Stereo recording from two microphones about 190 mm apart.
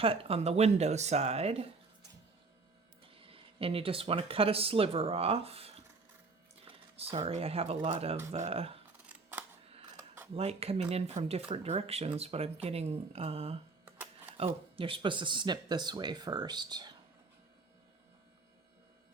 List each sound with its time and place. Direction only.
0.0 s speech: 30° right (ahead or behind)
3.2 s speech: 30° right (ahead or behind)
9.0 s scissors: 5° right (ahead or behind)
10.3 s speech: 30° right (ahead or behind)